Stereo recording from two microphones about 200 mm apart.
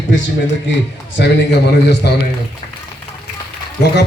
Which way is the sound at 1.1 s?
60° left (ahead or behind).